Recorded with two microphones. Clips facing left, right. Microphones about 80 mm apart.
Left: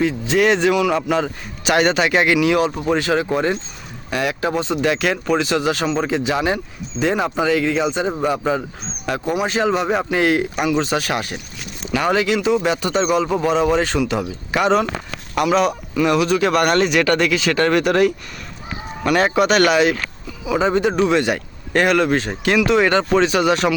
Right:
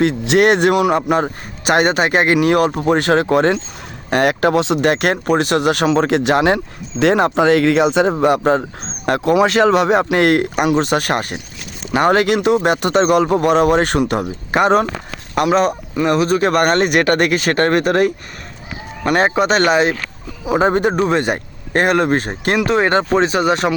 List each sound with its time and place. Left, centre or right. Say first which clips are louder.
0.0 s a man's voice: right 4 dB; right
4.9 s a man's voice: right 3 dB; right
20.4 s speech: right 3 dB; right